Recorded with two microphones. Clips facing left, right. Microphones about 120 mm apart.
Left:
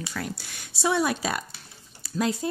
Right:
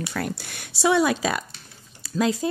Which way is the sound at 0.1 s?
60° right (ahead or behind).